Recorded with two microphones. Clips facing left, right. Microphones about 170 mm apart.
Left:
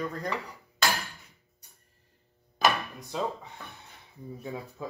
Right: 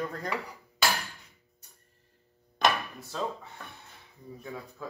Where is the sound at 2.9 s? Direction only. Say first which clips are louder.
Left 2 dB; 15° left (ahead or behind).